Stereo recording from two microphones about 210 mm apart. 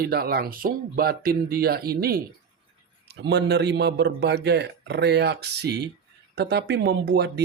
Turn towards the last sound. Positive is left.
turn(degrees=-50)  # may be behind; listen again after turning